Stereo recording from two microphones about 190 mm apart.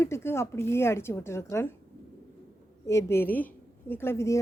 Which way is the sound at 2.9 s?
15° left (ahead or behind).